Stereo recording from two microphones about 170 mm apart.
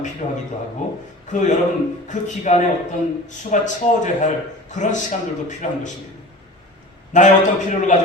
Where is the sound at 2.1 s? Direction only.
45° left (ahead or behind).